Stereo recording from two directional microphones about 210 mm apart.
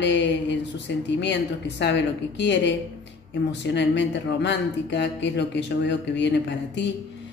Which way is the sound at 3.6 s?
55° left (ahead or behind).